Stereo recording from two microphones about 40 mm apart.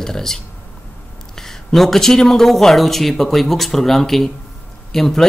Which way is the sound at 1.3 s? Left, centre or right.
Centre.